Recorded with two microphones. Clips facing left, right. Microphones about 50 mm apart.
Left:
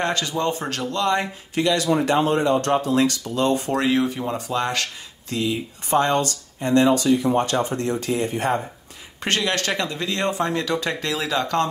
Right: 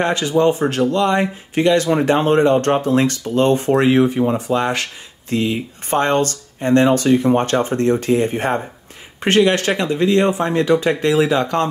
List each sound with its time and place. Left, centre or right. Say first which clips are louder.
0.0 s speech: right 7 dB; right
1.5 s speech: right 5 dB; right
5.3 s speech: right 5 dB; right
9.2 s speech: right 8 dB; right